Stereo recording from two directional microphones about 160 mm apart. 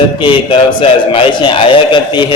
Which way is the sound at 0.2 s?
30° left (ahead or behind).